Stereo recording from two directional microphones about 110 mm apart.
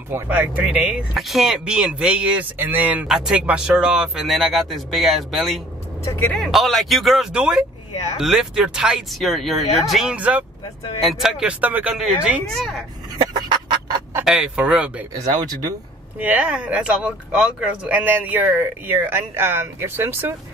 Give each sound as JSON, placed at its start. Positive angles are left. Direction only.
{"t": 0.1, "sound": "speech", "side_deg": -15}
{"t": 6.0, "sound": "speech", "side_deg": 25}
{"t": 6.3, "sound": "speech", "side_deg": 0}
{"t": 10.1, "sound": "speech", "side_deg": -10}
{"t": 11.0, "sound": "speech", "side_deg": 0}
{"t": 13.2, "sound": "fowl", "side_deg": -40}
{"t": 14.2, "sound": "speech", "side_deg": -10}
{"t": 15.1, "sound": "speech", "side_deg": -35}
{"t": 16.2, "sound": "speech", "side_deg": -15}